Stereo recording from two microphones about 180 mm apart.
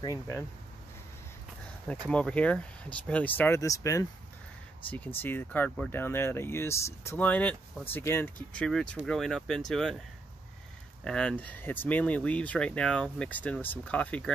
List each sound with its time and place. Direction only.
0.0 s speech: 20° left (ahead or behind)
2.0 s speech: 5° left (ahead or behind)
11.1 s speech: 5° left (ahead or behind)